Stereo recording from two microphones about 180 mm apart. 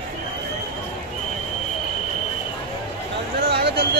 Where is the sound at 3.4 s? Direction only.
65° right (ahead or behind).